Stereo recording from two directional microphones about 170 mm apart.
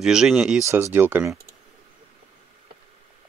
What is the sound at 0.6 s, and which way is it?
Speech, 15° right (ahead or behind).